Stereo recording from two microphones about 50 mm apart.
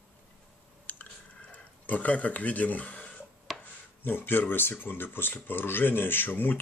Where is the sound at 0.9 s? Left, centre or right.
Left.